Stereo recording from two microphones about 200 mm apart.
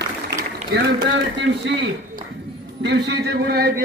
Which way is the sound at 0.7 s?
55° right (ahead or behind).